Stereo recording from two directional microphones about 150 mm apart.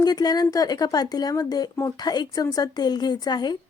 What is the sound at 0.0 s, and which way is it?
Speech, 25° left (ahead or behind).